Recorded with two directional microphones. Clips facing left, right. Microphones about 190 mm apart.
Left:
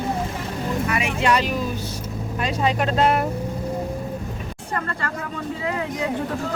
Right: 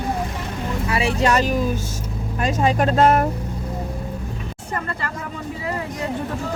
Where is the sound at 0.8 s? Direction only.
30° right (ahead or behind).